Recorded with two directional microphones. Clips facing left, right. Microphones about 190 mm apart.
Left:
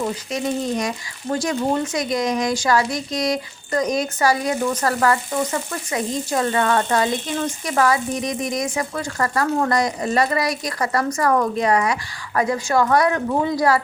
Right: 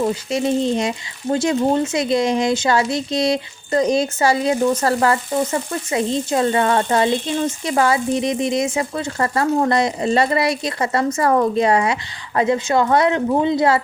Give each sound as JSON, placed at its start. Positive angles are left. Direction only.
{"t": 0.0, "sound": "speech", "side_deg": -30}